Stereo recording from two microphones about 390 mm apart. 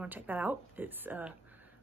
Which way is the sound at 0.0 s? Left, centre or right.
Centre.